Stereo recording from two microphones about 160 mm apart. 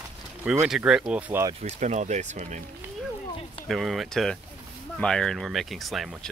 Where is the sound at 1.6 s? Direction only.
50° right (ahead or behind).